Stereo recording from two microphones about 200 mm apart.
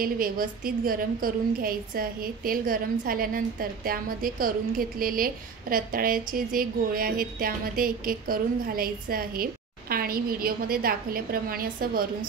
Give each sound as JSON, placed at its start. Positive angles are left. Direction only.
{"t": 0.0, "sound": "a woman's voice", "side_deg": -45}